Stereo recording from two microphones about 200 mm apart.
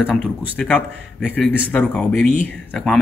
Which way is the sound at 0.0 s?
5° right (ahead or behind).